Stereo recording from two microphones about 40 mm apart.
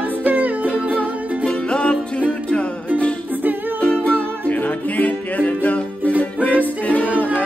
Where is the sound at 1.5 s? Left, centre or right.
Left.